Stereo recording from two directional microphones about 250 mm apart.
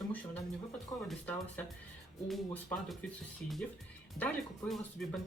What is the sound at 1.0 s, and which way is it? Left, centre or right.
Speech, centre.